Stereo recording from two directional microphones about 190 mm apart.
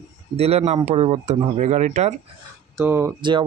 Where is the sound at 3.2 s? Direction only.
25° right (ahead or behind).